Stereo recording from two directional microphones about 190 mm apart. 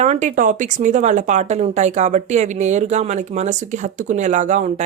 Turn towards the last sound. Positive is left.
turn(degrees=-40)  # may be behind; listen again after turning